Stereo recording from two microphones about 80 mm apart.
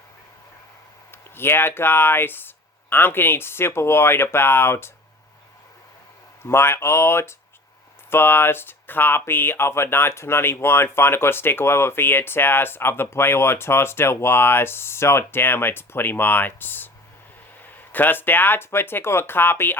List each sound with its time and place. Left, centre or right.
1.1 s speech: left
6.4 s speech: left
17.9 s speech: left